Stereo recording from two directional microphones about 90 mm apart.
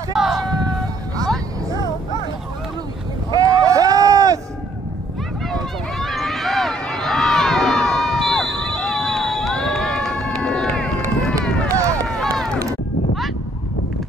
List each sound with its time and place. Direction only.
0.2 s a sound: centre (ahead or behind)
3.3 s run: 40° right (ahead or behind)
5.5 s run: centre (ahead or behind)
11.7 s run: 35° right (ahead or behind)